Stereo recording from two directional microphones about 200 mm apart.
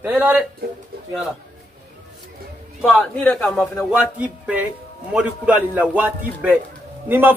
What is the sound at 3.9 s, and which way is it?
A man's voice, 5° right (ahead or behind).